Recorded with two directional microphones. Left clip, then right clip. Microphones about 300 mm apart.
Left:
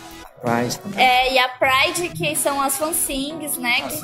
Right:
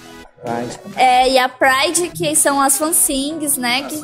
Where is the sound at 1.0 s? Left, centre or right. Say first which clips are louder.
Right 4 dB; right.